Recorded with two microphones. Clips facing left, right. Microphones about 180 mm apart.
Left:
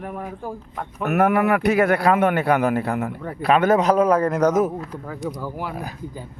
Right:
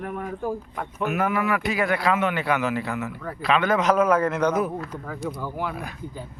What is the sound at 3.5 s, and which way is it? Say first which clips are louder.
A man's voice: left 4 dB; 40° left (ahead or behind).